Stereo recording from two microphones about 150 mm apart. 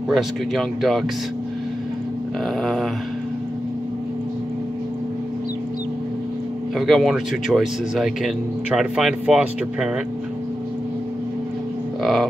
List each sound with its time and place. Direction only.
0.1 s speech: centre (ahead or behind)
2.6 s dog: centre (ahead or behind)
6.8 s speech: centre (ahead or behind)
12.0 s livestock: centre (ahead or behind)